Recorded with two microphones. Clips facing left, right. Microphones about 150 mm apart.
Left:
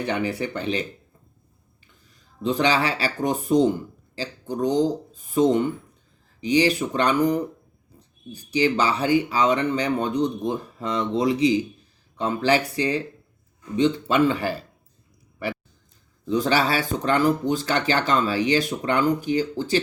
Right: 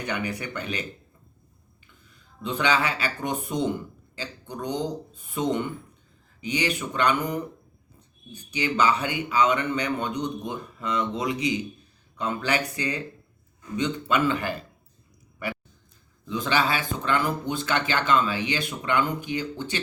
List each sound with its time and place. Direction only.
0.0 s speech: 30° left (ahead or behind)
2.0 s speech: 35° left (ahead or behind)
15.4 s a sound: 30° left (ahead or behind)
16.2 s speech: 40° left (ahead or behind)